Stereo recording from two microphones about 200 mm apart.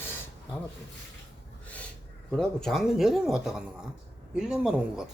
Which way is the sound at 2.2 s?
Centre (ahead or behind).